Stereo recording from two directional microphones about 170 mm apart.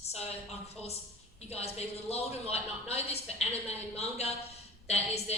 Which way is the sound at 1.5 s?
40° left (ahead or behind).